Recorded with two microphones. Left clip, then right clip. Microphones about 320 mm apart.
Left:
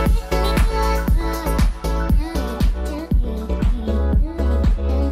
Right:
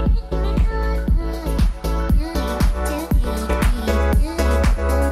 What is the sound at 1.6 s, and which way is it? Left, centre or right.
Music, centre.